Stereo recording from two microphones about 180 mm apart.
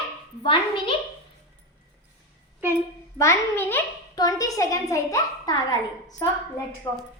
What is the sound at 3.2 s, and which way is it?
A child's voice, 15° left (ahead or behind).